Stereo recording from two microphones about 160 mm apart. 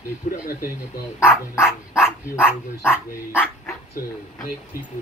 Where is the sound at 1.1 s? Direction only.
15° left (ahead or behind).